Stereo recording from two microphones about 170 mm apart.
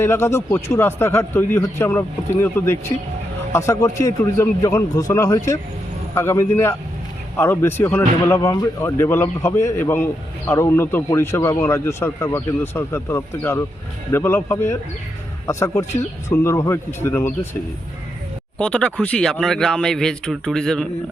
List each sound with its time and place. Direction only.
0.0 s a man's voice: 15° left (ahead or behind)
18.6 s speech: 5° left (ahead or behind)